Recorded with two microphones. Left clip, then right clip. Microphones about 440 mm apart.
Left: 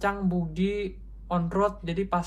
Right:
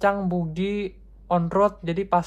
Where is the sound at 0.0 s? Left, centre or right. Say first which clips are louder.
Right 6 dB; centre.